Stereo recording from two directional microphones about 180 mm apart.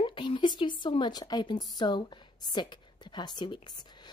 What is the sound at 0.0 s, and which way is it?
A woman's voice, 25° left (ahead or behind).